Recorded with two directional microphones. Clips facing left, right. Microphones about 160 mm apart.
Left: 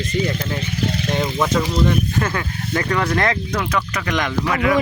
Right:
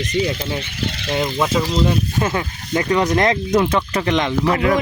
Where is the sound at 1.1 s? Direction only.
15° right (ahead or behind).